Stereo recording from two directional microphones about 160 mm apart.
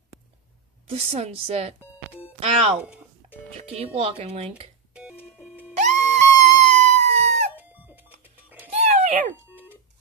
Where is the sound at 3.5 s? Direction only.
40° right (ahead or behind).